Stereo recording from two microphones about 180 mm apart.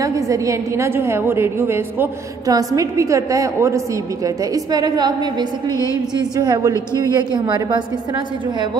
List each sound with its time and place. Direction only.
0.0 s a woman's voice: 20° right (ahead or behind)